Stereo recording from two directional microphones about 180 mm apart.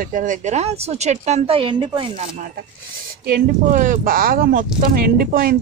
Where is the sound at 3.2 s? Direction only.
50° right (ahead or behind).